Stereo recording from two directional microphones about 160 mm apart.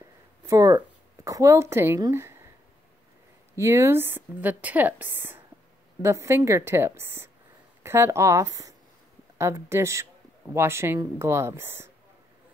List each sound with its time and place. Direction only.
0.5 s speech: 25° right (ahead or behind)
3.5 s speech: 15° right (ahead or behind)